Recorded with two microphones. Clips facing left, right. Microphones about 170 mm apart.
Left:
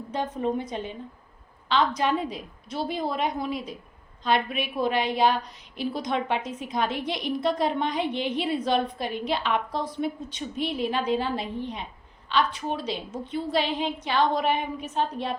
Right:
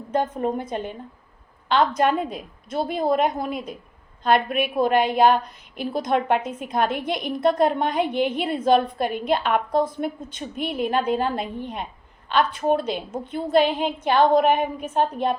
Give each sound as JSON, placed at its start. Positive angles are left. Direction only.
{"t": 0.1, "sound": "a woman's voice", "side_deg": -50}